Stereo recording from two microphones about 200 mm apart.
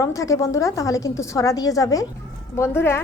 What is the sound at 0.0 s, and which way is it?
A woman's voice, 15° left (ahead or behind).